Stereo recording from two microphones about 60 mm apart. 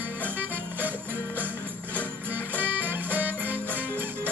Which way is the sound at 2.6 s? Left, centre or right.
Right.